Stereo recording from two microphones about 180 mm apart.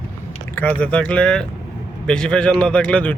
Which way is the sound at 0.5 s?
10° left (ahead or behind).